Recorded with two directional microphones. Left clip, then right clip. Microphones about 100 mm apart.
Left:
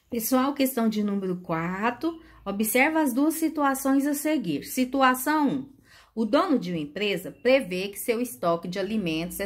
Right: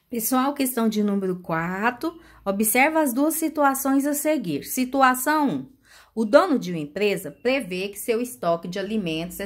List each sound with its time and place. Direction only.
0.1 s speech: 25° right (ahead or behind)
2.0 s a woman's voice: 35° right (ahead or behind)
7.4 s a woman's voice: 20° right (ahead or behind)